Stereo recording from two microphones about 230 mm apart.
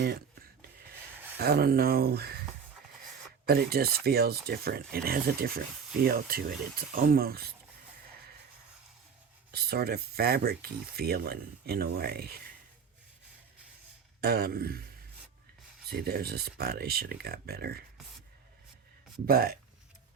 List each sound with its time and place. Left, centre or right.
1.4 s speech: right
3.4 s speech: right
9.5 s speech: right
14.2 s speech: right
15.9 s speech: right
19.3 s speech: right